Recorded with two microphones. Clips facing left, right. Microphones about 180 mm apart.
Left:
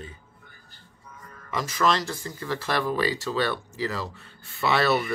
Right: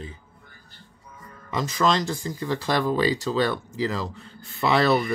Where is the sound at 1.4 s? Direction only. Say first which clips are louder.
Right 2 dB; 20° right (ahead or behind).